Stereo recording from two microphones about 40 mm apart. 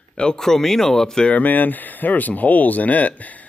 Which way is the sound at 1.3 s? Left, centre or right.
Left.